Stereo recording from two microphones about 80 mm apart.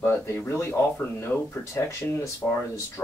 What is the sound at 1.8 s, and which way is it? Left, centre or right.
Speech, left.